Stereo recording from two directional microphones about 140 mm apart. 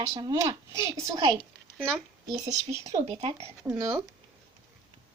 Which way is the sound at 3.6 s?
20° right (ahead or behind).